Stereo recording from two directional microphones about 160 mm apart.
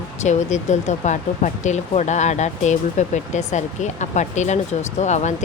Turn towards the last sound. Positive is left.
turn(degrees=45)  # may be behind; listen again after turning